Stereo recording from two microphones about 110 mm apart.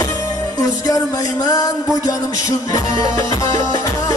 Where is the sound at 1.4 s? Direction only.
35° left (ahead or behind).